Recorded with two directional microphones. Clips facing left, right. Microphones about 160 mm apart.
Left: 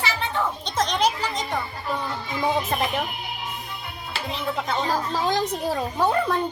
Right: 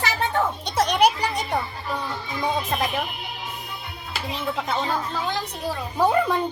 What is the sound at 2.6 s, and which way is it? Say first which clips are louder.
Speech: left 1 dB; centre (ahead or behind).